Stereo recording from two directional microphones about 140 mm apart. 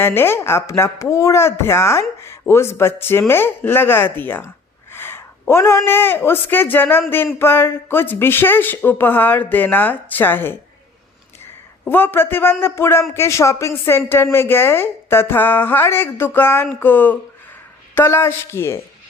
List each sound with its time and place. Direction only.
0.0 s speech: 15° left (ahead or behind)
11.9 s speech: 15° left (ahead or behind)